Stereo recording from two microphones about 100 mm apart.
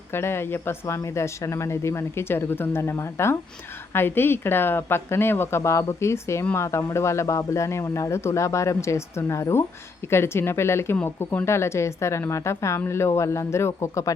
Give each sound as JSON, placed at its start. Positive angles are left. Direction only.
{"t": 0.1, "sound": "speech", "side_deg": 25}